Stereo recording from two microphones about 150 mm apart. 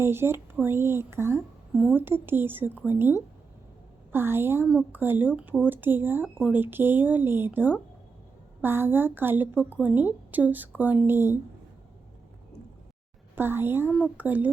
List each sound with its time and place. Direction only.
0.0 s speech: 15° right (ahead or behind)
13.3 s speech: 15° right (ahead or behind)